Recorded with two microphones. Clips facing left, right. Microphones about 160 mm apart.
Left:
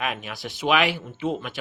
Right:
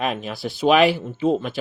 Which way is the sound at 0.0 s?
35° right (ahead or behind).